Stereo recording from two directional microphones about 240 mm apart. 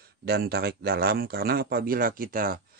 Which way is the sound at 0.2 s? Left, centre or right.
Right.